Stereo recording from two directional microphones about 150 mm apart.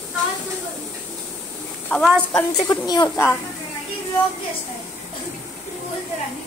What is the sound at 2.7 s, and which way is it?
Speech, 30° left (ahead or behind).